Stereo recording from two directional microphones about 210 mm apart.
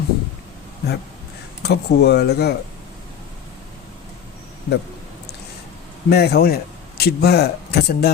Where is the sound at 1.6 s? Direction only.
50° left (ahead or behind).